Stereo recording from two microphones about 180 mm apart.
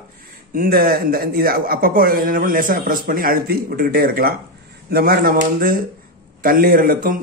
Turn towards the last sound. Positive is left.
turn(degrees=-50)  # may be behind; listen again after turning